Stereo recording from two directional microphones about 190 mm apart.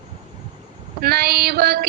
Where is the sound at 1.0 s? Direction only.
55° right (ahead or behind).